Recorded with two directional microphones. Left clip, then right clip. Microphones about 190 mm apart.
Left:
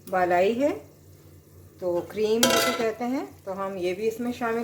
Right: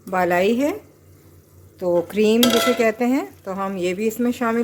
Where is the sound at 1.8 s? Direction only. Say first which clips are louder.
Right 8 dB; 65° right (ahead or behind).